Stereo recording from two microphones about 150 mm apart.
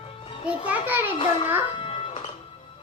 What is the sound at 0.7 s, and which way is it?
Speech, 15° right (ahead or behind).